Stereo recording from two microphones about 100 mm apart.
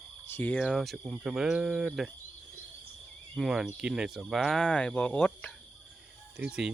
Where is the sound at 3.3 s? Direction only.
5° right (ahead or behind); by 5.3 s 10° left (ahead or behind).